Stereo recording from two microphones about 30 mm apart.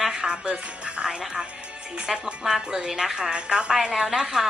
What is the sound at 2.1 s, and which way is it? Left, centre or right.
Music, centre.